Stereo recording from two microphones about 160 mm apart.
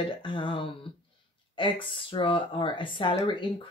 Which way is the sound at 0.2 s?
30° left (ahead or behind).